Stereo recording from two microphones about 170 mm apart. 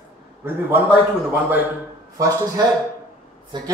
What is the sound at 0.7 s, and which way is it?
A man's voice, 10° right (ahead or behind).